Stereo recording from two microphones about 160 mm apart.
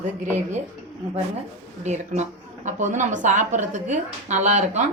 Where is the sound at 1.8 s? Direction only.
45° right (ahead or behind).